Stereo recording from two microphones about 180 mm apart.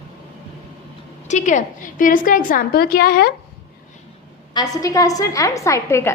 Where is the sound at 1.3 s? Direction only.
40° left (ahead or behind); by 3.3 s 55° left (ahead or behind).